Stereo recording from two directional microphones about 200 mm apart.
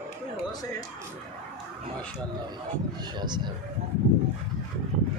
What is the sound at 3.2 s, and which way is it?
Speech, 20° right (ahead or behind).